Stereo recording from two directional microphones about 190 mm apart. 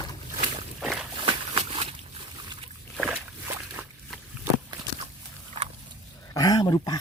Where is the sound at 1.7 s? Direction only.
30° right (ahead or behind).